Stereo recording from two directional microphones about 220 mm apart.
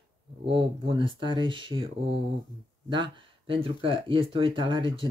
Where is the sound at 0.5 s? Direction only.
20° right (ahead or behind).